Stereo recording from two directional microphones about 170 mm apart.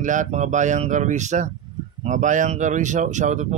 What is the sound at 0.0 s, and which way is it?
Speech, 45° right (ahead or behind).